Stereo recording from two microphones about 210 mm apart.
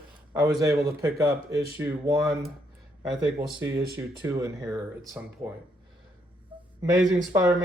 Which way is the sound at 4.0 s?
15° right (ahead or behind).